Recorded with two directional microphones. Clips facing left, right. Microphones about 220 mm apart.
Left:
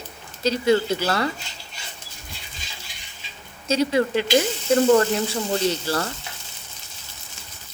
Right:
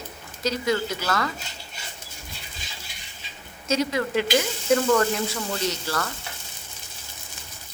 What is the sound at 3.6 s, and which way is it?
A woman's voice, 30° left (ahead or behind).